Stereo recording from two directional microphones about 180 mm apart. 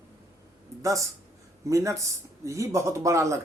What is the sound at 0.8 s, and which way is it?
Speech, 20° right (ahead or behind).